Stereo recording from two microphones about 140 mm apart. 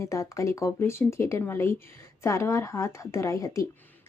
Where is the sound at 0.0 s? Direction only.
20° left (ahead or behind).